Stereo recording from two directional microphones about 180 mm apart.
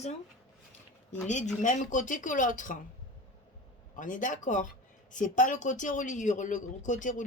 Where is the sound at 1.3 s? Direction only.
40° left (ahead or behind).